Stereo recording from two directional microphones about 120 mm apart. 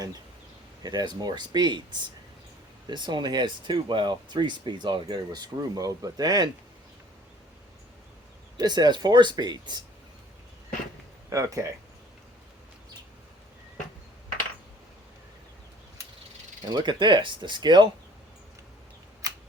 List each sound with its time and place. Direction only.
0.8 s speech: 35° right (ahead or behind)
8.5 s speech: 35° right (ahead or behind)
11.3 s speech: 25° right (ahead or behind)
16.6 s speech: 35° right (ahead or behind)
19.2 s a sound: 30° right (ahead or behind)